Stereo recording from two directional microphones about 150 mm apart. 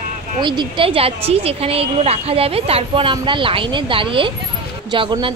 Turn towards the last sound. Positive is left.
turn(degrees=-35)  # may be behind; listen again after turning